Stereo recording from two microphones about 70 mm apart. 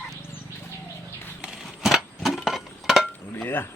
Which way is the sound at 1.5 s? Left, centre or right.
Centre.